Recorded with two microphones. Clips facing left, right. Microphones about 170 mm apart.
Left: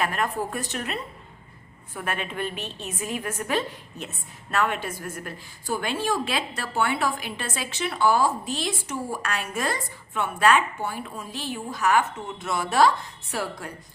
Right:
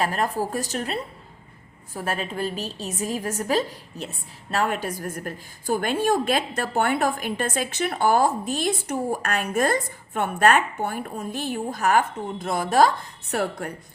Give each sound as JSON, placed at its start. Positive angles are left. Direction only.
{"t": 0.0, "sound": "a woman's voice", "side_deg": -35}